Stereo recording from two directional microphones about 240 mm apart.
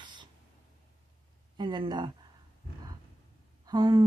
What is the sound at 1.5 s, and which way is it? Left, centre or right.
Speech, centre.